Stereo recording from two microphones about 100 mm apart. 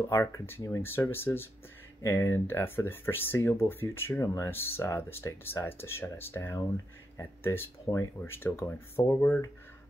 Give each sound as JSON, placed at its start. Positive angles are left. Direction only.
{"t": 0.1, "sound": "speech", "side_deg": 25}